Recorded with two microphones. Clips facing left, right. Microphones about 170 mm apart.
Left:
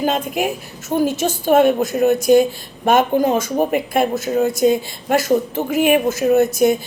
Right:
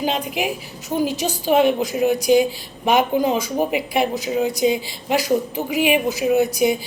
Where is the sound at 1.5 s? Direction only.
45° left (ahead or behind).